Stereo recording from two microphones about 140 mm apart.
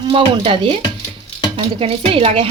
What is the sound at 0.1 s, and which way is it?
Speech, 35° right (ahead or behind).